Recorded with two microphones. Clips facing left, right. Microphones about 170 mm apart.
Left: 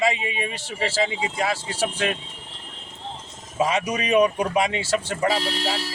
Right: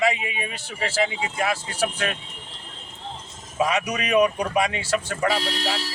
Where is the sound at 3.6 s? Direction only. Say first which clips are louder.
Left 1 dB; 25° left (ahead or behind).